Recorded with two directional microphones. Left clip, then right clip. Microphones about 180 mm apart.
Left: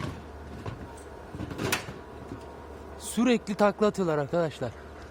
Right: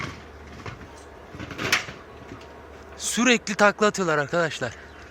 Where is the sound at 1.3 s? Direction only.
45° left (ahead or behind).